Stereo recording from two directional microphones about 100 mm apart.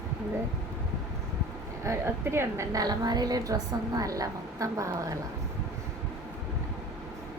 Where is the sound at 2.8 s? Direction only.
40° right (ahead or behind).